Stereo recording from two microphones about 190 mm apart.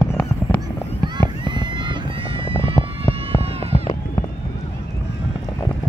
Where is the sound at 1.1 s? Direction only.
25° right (ahead or behind).